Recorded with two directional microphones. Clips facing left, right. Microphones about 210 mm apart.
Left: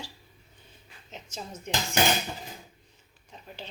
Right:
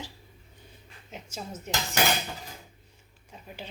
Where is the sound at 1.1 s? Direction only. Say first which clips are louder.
Right 1 dB; 10° right (ahead or behind).